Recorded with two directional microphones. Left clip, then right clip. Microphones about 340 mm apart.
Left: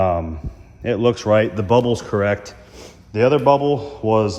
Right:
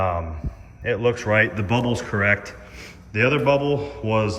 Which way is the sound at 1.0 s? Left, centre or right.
Centre.